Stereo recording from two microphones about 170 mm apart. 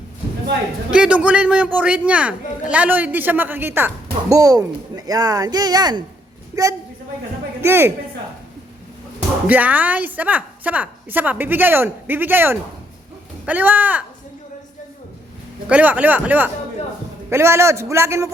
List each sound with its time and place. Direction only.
0.9 s a man's voice: 5° right (ahead or behind)
9.5 s a man's voice: 10° right (ahead or behind)
15.7 s a man's voice: 10° right (ahead or behind)